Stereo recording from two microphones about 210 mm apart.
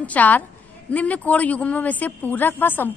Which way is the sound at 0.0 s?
5° left (ahead or behind).